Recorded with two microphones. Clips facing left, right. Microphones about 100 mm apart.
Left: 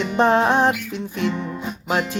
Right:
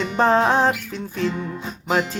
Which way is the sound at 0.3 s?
35° right (ahead or behind).